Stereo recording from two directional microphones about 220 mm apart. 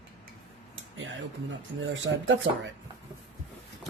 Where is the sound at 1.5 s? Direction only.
55° right (ahead or behind).